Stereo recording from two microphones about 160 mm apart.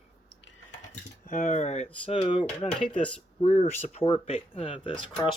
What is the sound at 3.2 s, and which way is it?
Speech, 45° left (ahead or behind).